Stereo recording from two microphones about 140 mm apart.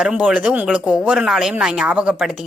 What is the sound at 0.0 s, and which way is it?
A woman's voice, 5° right (ahead or behind).